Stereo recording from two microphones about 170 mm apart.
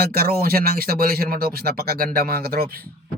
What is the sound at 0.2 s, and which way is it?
Speech, 60° right (ahead or behind).